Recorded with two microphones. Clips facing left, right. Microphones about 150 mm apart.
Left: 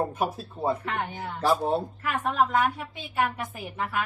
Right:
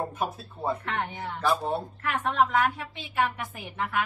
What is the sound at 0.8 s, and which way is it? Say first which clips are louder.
Speech: even; 5° left (ahead or behind).